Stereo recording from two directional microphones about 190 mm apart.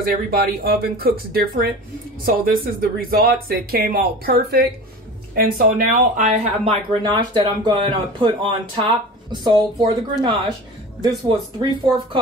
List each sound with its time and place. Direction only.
0.0 s speech: 50° right (ahead or behind); by 12.2 s 25° right (ahead or behind)